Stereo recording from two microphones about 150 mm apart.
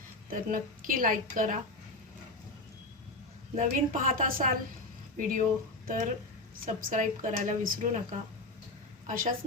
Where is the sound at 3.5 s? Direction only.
60° right (ahead or behind).